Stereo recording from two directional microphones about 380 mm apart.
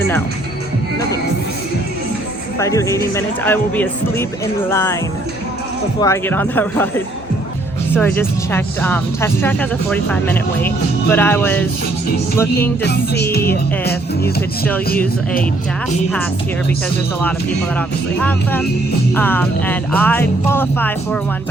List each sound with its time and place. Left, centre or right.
2.6 s speech: centre
6.0 s speech: centre
7.9 s speech: centre
12.8 s music: left
17.7 s speech: centre